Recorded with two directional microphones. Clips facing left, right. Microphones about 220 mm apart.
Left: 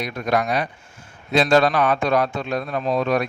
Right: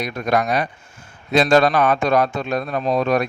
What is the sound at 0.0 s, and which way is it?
A man's voice, 45° right (ahead or behind).